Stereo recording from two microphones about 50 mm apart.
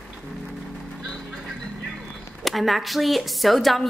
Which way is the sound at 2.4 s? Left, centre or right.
Centre.